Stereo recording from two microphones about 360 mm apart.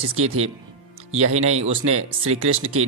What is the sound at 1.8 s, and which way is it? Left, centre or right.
Speech, right.